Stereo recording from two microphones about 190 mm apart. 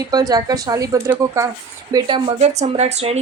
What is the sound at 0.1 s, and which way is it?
A woman's voice, 20° right (ahead or behind).